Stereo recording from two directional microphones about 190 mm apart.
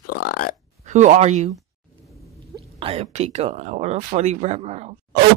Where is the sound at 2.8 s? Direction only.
30° right (ahead or behind).